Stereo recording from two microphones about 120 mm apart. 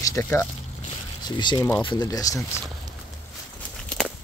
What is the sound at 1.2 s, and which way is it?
Speech, 40° left (ahead or behind).